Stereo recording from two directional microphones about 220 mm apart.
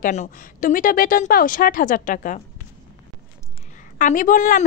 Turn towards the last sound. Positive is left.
turn(degrees=35)  # may be behind; listen again after turning